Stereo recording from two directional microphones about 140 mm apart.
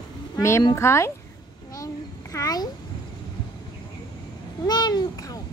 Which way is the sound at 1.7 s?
25° left (ahead or behind).